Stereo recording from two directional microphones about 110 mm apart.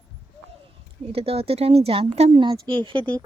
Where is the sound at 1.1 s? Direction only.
60° right (ahead or behind).